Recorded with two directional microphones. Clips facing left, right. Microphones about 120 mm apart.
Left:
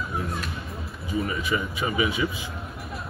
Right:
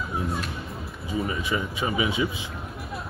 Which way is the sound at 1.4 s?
25° right (ahead or behind).